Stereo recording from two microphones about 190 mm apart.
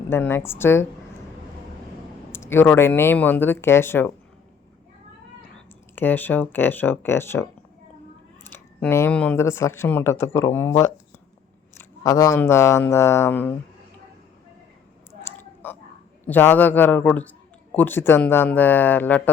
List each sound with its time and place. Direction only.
0.1 s speech: 10° left (ahead or behind)
2.3 s speech: 10° left (ahead or behind)
6.0 s speech: 10° left (ahead or behind)
8.4 s speech: 10° left (ahead or behind)
15.3 s whispering: 15° left (ahead or behind)
16.2 s speech: 10° left (ahead or behind)